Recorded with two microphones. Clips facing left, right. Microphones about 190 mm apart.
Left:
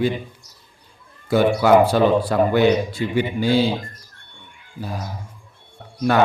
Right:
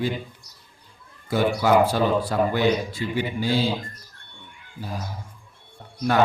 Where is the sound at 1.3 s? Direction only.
70° left (ahead or behind).